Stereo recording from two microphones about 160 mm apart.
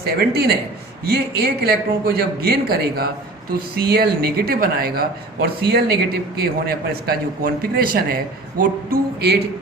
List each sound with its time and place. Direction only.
0.0 s a man's voice: 90° right; by 8.2 s 65° right (ahead or behind)
8.9 s a man's voice: 90° right